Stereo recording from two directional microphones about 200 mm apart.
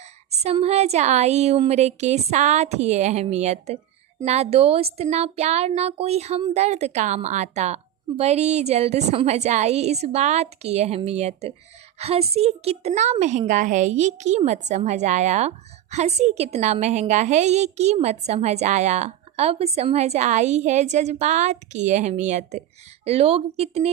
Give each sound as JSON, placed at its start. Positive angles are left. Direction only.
{"t": 0.4, "sound": "a woman's voice", "side_deg": -30}